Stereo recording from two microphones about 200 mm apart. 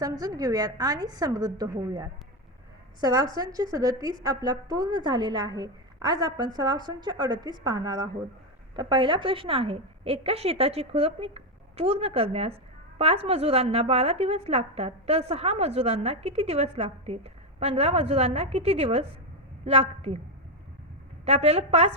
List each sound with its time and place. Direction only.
0.0 s a woman's voice: 20° right (ahead or behind)
21.2 s a woman's voice: 30° right (ahead or behind)